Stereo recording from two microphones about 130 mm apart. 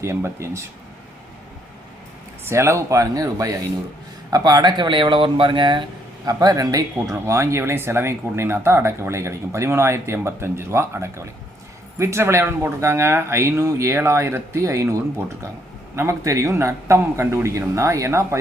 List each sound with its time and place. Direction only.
0.0 s speech: 20° right (ahead or behind)
2.4 s speech: 20° right (ahead or behind)